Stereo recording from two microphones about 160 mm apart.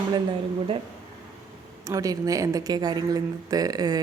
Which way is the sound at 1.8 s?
20° right (ahead or behind).